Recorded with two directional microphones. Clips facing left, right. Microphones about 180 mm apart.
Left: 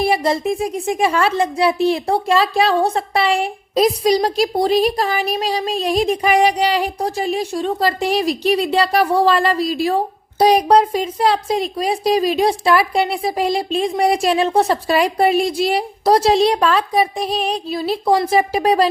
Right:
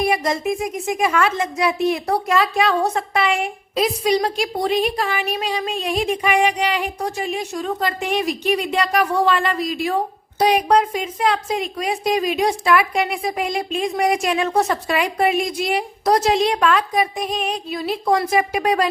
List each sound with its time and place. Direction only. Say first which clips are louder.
0.0 s speech: left 3 dB; 30° left (ahead or behind)